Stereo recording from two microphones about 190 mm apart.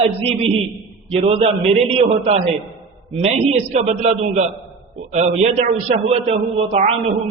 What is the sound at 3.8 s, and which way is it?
A man's voice, 35° right (ahead or behind).